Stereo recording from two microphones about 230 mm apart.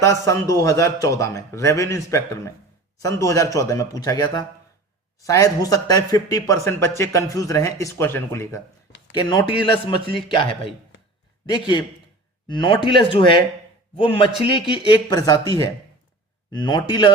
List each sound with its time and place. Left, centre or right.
0.0 s a man's voice: centre